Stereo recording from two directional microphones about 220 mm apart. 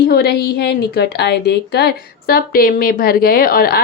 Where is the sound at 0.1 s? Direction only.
45° left (ahead or behind).